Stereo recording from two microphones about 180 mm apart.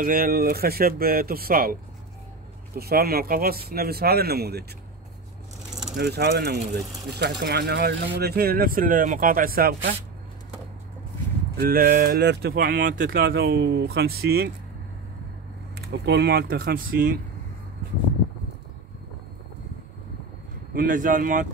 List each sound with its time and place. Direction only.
0.0 s speech: 55° right (ahead or behind)
2.8 s speech: 60° right (ahead or behind)
5.9 s speech: 60° right (ahead or behind)
11.5 s speech: 55° right (ahead or behind)
15.8 s speech: 65° right (ahead or behind); by 17.2 s 50° right (ahead or behind)
20.7 s speech: 50° right (ahead or behind)